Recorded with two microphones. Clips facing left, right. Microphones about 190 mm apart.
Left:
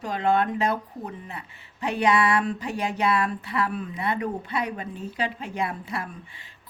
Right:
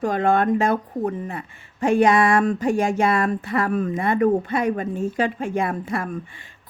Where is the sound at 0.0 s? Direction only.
50° right (ahead or behind).